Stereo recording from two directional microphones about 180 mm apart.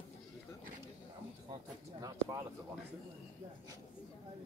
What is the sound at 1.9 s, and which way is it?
Speech, 20° right (ahead or behind).